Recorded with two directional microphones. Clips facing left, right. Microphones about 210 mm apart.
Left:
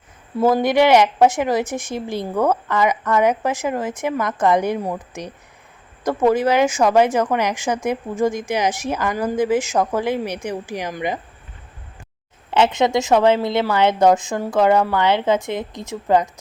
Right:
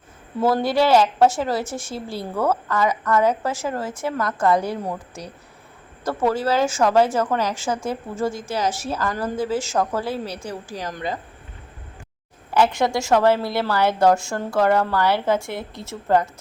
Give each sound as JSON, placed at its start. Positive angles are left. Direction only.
{"t": 0.3, "sound": "a woman's voice", "side_deg": 15}
{"t": 12.5, "sound": "a woman's voice", "side_deg": 20}